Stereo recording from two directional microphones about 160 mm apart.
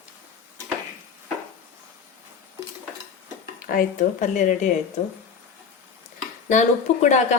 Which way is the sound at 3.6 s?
60° left (ahead or behind).